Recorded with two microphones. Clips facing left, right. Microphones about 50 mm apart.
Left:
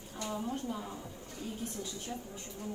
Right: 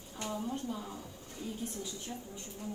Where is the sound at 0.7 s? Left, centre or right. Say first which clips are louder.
Left 1 dB; centre.